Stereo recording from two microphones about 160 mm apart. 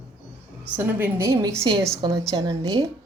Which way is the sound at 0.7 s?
10° right (ahead or behind).